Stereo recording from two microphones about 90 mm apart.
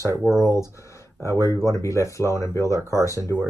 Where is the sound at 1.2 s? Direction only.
35° left (ahead or behind).